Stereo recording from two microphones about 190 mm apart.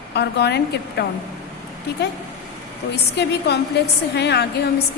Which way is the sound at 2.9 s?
60° left (ahead or behind).